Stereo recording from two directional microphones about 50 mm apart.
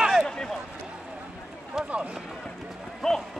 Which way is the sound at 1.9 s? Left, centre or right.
Right.